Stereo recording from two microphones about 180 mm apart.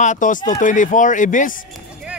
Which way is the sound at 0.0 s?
45° left (ahead or behind).